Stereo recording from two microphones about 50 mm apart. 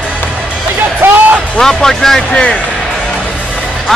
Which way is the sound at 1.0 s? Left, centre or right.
Right.